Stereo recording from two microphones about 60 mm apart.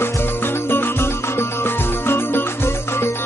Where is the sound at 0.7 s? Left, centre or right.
Left.